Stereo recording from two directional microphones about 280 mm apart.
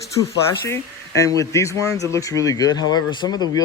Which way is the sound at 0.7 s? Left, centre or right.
Centre.